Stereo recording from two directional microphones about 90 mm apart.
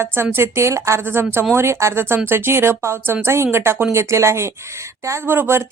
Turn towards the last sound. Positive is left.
turn(degrees=-30)  # may be behind; listen again after turning